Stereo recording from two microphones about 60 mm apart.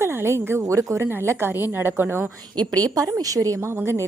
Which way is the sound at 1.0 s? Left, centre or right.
Right.